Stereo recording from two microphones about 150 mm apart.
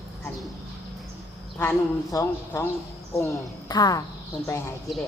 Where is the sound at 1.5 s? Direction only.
20° left (ahead or behind).